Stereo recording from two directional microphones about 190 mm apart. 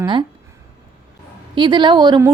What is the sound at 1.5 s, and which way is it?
Speech, 25° right (ahead or behind).